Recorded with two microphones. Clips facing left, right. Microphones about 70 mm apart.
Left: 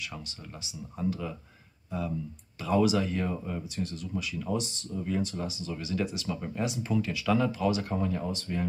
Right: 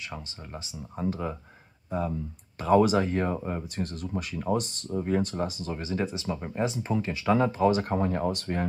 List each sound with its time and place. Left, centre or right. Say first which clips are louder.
0.7 s speech: right 1 dB; right